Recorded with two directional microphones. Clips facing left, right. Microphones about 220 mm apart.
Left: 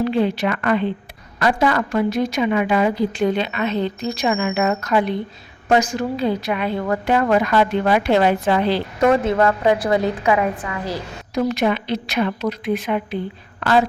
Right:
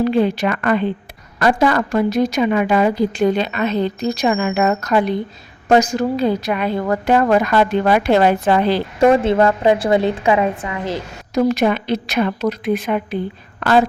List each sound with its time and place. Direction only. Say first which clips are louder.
0.1 s a woman's voice: right 3 dB; 45° right (ahead or behind)
9.0 s a woman's voice: right 4 dB; 25° right (ahead or behind)
11.3 s a woman's voice: right 4 dB; 45° right (ahead or behind)